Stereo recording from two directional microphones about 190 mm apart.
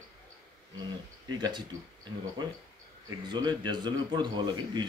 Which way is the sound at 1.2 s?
20° right (ahead or behind).